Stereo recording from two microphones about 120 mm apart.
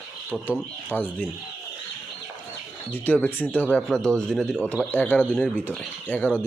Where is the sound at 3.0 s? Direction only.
15° left (ahead or behind).